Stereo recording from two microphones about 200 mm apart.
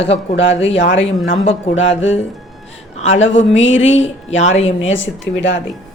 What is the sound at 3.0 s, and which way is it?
Speech, 75° left (ahead or behind).